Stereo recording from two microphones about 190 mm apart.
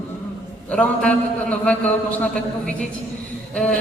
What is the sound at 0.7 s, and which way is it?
A woman's voice, 5° left (ahead or behind).